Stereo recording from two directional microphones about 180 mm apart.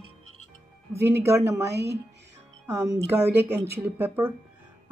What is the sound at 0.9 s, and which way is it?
A woman's voice, 15° right (ahead or behind).